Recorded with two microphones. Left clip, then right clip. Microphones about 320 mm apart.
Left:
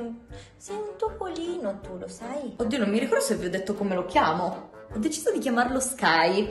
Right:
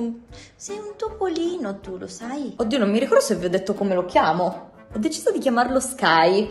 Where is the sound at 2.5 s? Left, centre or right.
Centre.